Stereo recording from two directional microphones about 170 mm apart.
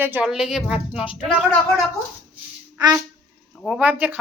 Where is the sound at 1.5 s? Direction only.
5° left (ahead or behind).